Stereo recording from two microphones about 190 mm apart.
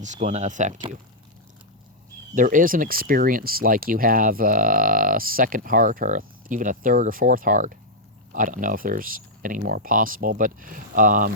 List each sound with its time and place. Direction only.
0.0 s speech: 40° right (ahead or behind)
2.3 s speech: 45° right (ahead or behind)